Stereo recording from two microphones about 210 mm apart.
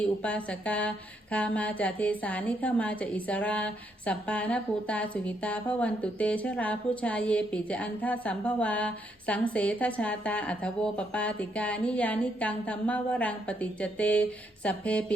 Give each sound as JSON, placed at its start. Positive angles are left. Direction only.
{"t": 0.0, "sound": "speech", "side_deg": 5}